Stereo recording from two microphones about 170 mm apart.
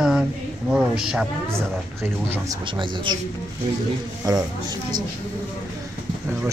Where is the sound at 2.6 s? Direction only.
30° right (ahead or behind).